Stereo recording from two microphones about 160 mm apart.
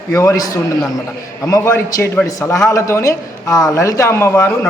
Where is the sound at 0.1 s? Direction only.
20° left (ahead or behind).